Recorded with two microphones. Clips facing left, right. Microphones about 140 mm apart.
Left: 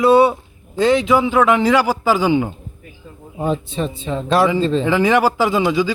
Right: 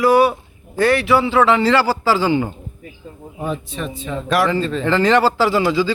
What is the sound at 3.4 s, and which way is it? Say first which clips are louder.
Speech: left 4 dB; 30° left (ahead or behind).